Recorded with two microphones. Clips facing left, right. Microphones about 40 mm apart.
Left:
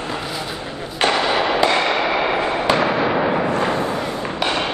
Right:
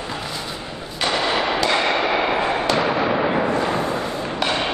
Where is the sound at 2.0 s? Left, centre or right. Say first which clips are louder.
Left 1 dB; centre.